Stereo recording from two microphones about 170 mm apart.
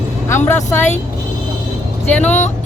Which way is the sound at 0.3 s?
15° left (ahead or behind).